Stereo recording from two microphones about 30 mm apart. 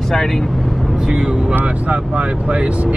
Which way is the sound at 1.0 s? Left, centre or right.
Right.